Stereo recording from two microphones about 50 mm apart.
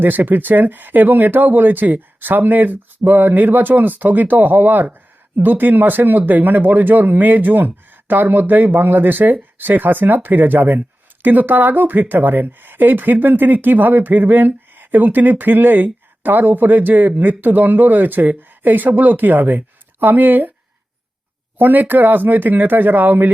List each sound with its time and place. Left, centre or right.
0.0 s speech: right
21.6 s speech: right